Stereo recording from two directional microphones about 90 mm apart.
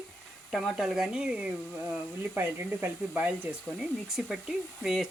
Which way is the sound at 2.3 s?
25° right (ahead or behind).